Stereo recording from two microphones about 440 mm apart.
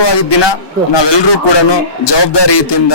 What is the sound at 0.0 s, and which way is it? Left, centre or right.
A man's voice, left.